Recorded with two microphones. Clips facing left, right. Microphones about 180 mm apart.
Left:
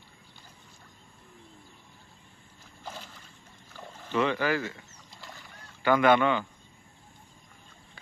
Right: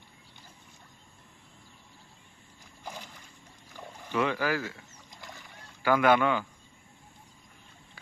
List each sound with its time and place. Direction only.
2.8 s boat: 15° right (ahead or behind)
3.8 s rowboat: 15° right (ahead or behind)
5.2 s rowboat: 20° right (ahead or behind)
5.8 s speech: 5° right (ahead or behind)